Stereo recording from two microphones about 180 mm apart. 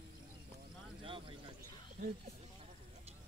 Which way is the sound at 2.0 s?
55° right (ahead or behind).